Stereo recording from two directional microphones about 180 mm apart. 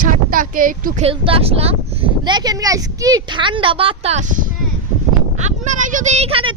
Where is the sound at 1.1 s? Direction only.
30° right (ahead or behind).